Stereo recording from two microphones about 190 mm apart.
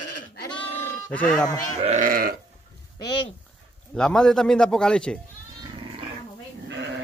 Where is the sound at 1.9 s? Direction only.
45° right (ahead or behind).